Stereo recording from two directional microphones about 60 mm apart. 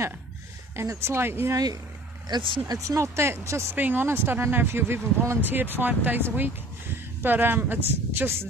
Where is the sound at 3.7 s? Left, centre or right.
Right.